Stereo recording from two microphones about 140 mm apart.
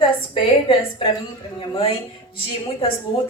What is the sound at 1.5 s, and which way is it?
Speech, 40° left (ahead or behind).